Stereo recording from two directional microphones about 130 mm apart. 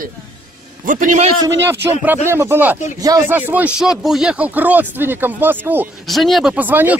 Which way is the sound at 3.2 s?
15° right (ahead or behind).